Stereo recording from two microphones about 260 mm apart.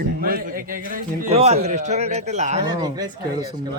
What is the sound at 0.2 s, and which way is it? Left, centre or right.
A man's voice, right.